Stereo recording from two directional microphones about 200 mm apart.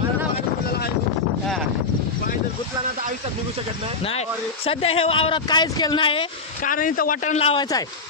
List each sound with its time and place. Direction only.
4.6 s speech: 30° left (ahead or behind)
6.6 s a man's voice: 45° left (ahead or behind)